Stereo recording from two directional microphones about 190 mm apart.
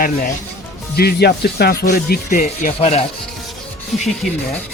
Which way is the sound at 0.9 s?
55° left (ahead or behind).